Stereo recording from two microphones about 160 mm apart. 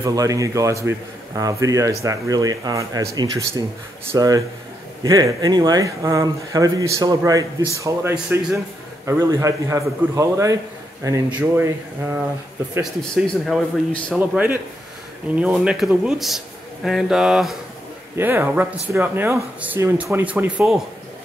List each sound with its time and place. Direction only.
0.0 s a man's voice: 20° right (ahead or behind)
13.0 s a man's voice: 5° left (ahead or behind)
14.1 s a man's voice: 10° right (ahead or behind)
18.1 s speech: 15° right (ahead or behind)